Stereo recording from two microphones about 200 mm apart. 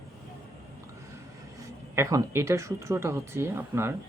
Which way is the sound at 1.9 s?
15° right (ahead or behind).